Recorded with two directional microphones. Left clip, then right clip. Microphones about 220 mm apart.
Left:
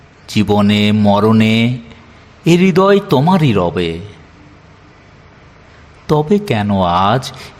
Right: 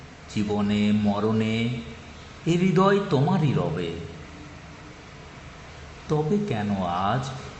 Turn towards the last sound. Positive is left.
turn(degrees=50)  # may be behind; listen again after turning